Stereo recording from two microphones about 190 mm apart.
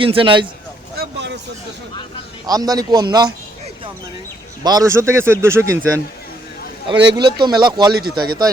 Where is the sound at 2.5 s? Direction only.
20° right (ahead or behind).